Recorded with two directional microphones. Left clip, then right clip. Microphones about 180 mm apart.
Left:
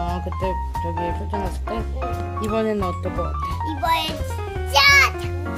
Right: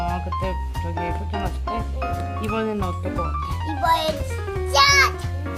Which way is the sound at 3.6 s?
20° left (ahead or behind).